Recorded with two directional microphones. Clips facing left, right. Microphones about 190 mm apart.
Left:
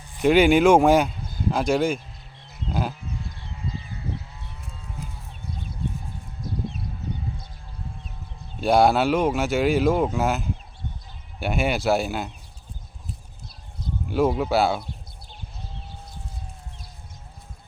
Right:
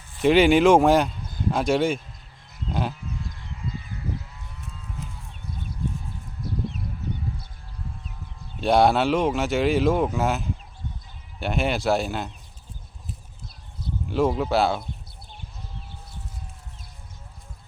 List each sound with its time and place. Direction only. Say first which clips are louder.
0.2 s speech: even; centre (ahead or behind)
3.3 s a sound: even; 30° left (ahead or behind)
8.6 s speech: left 1 dB; centre (ahead or behind)
14.1 s speech: left 1 dB; centre (ahead or behind)